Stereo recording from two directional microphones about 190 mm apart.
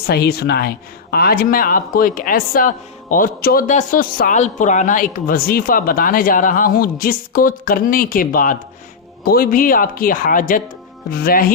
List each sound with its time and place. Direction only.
0.1 s speech: 55° left (ahead or behind)